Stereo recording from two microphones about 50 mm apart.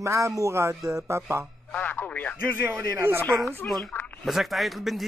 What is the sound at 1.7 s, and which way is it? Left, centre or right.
Speech, left.